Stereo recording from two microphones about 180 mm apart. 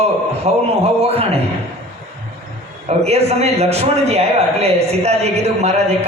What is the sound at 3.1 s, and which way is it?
A man's voice, 35° right (ahead or behind).